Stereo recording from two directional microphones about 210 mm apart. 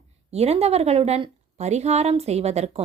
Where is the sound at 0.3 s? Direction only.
30° right (ahead or behind).